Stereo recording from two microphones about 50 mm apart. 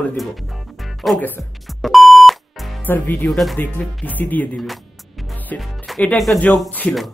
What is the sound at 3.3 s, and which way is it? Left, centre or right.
Speech, centre.